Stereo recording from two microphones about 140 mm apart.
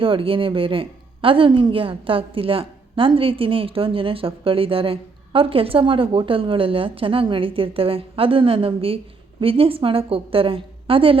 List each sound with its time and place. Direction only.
0.0 s speech: 40° right (ahead or behind)